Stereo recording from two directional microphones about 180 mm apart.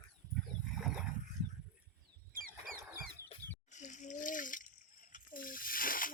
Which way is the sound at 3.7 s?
40° left (ahead or behind).